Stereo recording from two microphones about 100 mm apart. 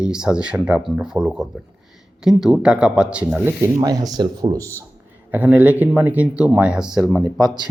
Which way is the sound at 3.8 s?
35° right (ahead or behind).